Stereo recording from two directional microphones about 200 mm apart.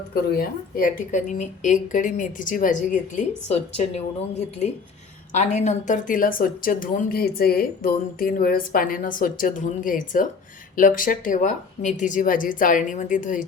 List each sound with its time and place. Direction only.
0.1 s speech: 45° left (ahead or behind)